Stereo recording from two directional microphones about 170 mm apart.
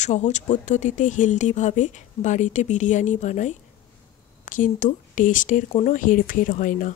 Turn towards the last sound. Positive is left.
turn(degrees=50)  # may be behind; listen again after turning